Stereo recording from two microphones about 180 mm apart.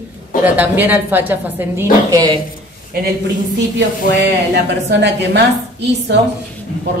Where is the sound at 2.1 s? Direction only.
25° right (ahead or behind).